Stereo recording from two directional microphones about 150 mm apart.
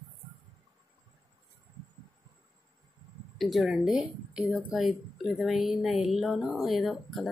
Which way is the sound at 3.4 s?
Centre (ahead or behind).